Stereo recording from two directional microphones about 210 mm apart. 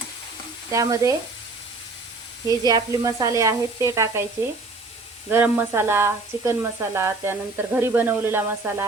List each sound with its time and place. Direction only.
0.7 s speech: 15° right (ahead or behind)
2.5 s speech: 15° right (ahead or behind)
5.3 s speech: 10° right (ahead or behind)